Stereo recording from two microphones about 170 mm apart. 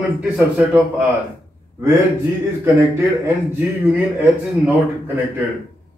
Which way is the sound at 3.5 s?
10° right (ahead or behind).